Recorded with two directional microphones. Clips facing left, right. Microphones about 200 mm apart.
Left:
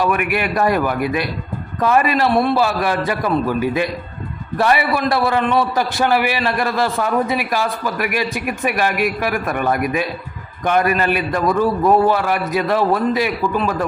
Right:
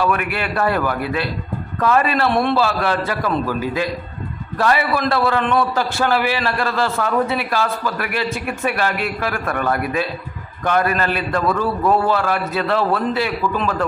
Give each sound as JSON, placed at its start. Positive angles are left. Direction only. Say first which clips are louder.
{"t": 0.0, "sound": "a man's voice", "louder": "left 2 dB", "side_deg": 15}
{"t": 2.6, "sound": "a man's voice", "louder": "left 1 dB", "side_deg": 15}
{"t": 5.9, "sound": "a man's voice", "louder": "left 1 dB", "side_deg": 15}